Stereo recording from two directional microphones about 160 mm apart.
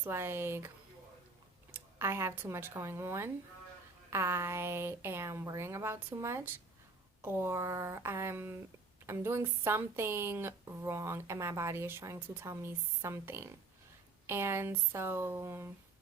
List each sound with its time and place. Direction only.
0.0 s a woman's voice: 15° right (ahead or behind)
1.7 s a woman's voice: 15° right (ahead or behind)